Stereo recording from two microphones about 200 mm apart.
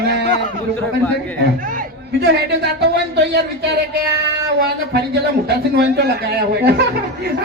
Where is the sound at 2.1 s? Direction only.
55° right (ahead or behind).